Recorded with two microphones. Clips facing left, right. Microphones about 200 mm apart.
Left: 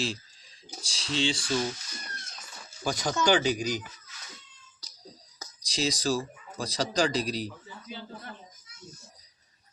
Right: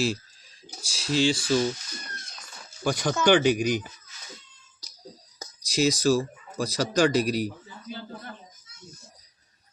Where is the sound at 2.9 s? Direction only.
55° right (ahead or behind).